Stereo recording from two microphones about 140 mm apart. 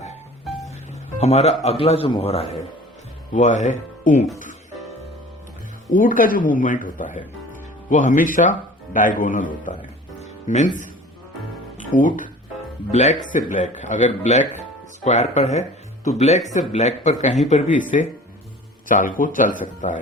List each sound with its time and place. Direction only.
0.4 s music: centre (ahead or behind)
0.9 s speech: 50° left (ahead or behind)
3.3 s a man's voice: 60° left (ahead or behind)
5.9 s speech: 75° left (ahead or behind)
10.2 s music: 55° left (ahead or behind)
11.8 s speech: 70° left (ahead or behind)
12.9 s a man's voice: 50° left (ahead or behind)
18.9 s speech: 70° left (ahead or behind)
19.8 s a man's voice: 60° left (ahead or behind)